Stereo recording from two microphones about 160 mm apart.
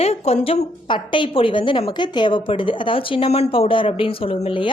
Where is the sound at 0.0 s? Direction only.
40° left (ahead or behind).